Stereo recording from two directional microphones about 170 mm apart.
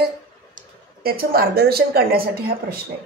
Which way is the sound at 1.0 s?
60° right (ahead or behind).